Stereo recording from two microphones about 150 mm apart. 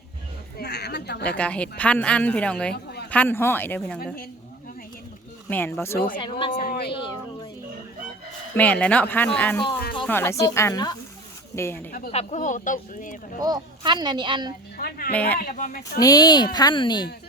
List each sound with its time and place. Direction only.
0.6 s a sound: 90° left
1.4 s a woman's voice: 10° left (ahead or behind)
4.0 s speech: 75° left (ahead or behind)
5.5 s a woman's voice: 10° left (ahead or behind)
6.1 s speech: 35° left (ahead or behind)
6.6 s a sound: 80° left
8.5 s a woman's voice: 10° left (ahead or behind)
11.9 s speech: 80° left
12.1 s speech: 55° left (ahead or behind)
13.4 s speech: 30° right (ahead or behind)
14.8 s speech: 85° left
15.1 s a woman's voice: 10° left (ahead or behind)
15.4 s speech: 70° left (ahead or behind)
16.0 s speech: 25° left (ahead or behind)